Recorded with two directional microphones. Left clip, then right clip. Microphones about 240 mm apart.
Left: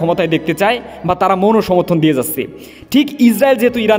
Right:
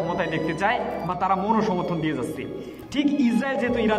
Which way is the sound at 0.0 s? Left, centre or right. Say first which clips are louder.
Left 10 dB; left.